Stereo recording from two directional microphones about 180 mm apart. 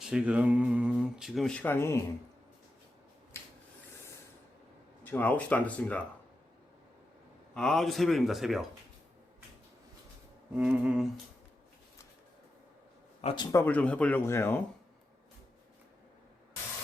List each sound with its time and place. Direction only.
0.0 s speech: 5° right (ahead or behind); by 2.0 s 15° left (ahead or behind)
5.0 s speech: 10° left (ahead or behind)
7.5 s speech: centre (ahead or behind)
10.5 s speech: 5° right (ahead or behind)
13.2 s speech: 25° left (ahead or behind)